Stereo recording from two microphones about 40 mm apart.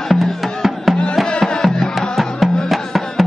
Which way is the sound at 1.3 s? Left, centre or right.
Centre.